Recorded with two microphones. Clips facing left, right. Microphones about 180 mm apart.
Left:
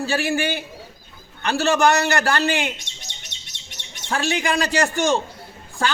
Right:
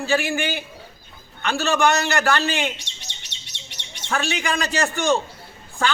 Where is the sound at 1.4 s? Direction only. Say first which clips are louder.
Left 2 dB; 35° left (ahead or behind).